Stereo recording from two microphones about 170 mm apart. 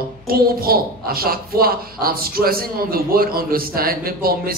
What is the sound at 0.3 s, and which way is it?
A child's voice, 60° right (ahead or behind).